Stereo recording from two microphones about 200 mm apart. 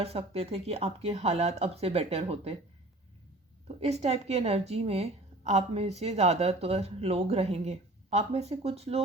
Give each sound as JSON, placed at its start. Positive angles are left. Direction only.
{"t": 0.0, "sound": "a woman's voice", "side_deg": -30}
{"t": 3.7, "sound": "a woman's voice", "side_deg": -30}